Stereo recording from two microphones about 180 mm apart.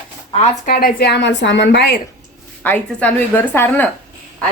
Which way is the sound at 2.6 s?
10° left (ahead or behind).